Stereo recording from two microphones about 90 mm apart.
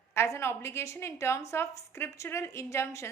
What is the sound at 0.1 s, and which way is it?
A woman's voice, 30° left (ahead or behind).